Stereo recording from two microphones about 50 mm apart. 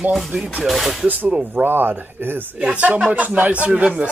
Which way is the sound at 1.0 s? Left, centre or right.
Right.